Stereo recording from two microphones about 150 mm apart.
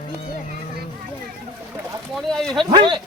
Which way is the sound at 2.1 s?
Centre (ahead or behind).